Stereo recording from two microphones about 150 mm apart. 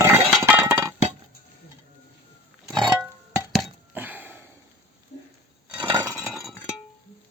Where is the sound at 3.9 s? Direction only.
10° right (ahead or behind).